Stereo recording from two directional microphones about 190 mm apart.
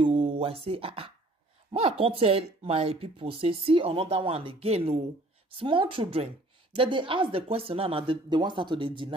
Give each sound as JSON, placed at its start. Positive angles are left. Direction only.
{"t": 0.0, "sound": "speech", "side_deg": -25}